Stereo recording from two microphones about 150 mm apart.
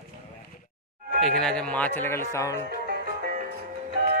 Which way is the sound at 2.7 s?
80° right.